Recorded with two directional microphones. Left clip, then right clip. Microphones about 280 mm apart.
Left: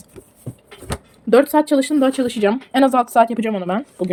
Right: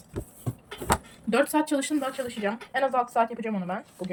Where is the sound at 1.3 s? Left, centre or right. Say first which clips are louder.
Left 11 dB; left.